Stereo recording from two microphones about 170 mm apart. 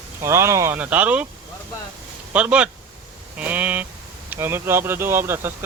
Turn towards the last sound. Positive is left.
turn(degrees=-15)  # may be behind; listen again after turning